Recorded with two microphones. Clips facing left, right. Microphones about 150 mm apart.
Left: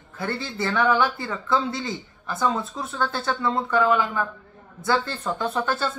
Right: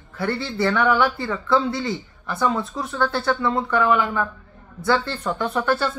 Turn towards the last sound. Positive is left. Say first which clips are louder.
# right 3 dB
turn(degrees=25)  # may be behind; listen again after turning